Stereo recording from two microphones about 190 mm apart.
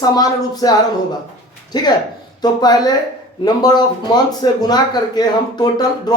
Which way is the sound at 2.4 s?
20° left (ahead or behind).